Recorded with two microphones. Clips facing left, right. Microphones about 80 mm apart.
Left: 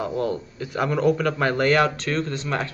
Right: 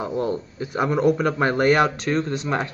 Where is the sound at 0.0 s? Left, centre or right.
Right.